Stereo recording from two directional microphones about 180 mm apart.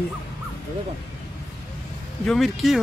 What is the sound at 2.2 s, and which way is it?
Speech, centre (ahead or behind).